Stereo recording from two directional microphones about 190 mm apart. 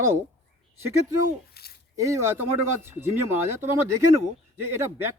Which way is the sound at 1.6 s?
55° left (ahead or behind).